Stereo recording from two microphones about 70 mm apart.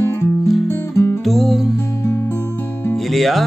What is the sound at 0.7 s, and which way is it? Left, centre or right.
Music, left.